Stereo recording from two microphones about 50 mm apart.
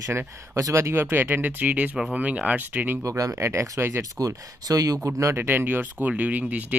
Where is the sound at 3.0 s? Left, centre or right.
Right.